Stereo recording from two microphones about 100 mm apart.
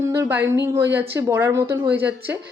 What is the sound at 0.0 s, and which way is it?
Speech, 30° right (ahead or behind).